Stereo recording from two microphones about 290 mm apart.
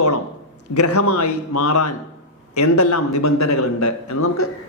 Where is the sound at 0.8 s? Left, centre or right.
Left.